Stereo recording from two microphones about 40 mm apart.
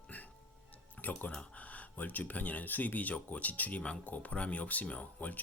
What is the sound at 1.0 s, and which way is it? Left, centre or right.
Speech, left.